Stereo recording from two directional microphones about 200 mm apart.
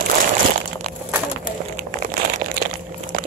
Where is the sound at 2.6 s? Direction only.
45° right (ahead or behind).